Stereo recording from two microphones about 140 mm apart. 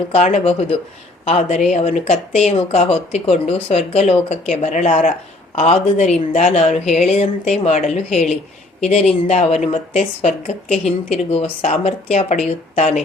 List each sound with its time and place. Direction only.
0.1 s a woman's voice: 50° left (ahead or behind)